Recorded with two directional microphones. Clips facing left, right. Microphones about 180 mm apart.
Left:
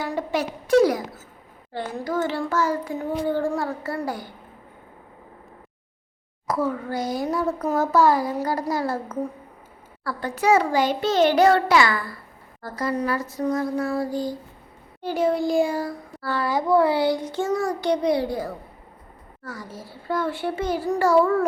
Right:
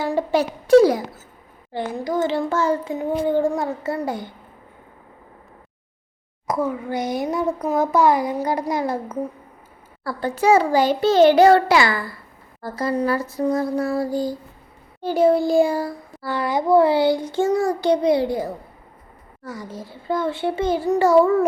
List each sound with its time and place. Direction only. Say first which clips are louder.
0.0 s a sound: right 5 dB; 30° right (ahead or behind)
1.7 s a child's voice: right 3 dB; 15° right (ahead or behind)
6.5 s a child's voice: right 2 dB; 15° right (ahead or behind); by 15.9 s 30° right (ahead or behind)
16.2 s a child's voice: right 2 dB; 15° right (ahead or behind)